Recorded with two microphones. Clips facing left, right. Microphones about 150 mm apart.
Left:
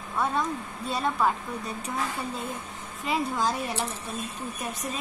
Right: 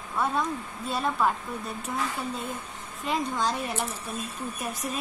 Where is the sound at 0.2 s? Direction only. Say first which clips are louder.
Even; centre (ahead or behind).